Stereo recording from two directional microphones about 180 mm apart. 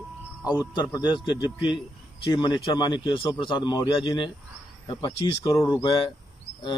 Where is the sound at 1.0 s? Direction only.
25° left (ahead or behind).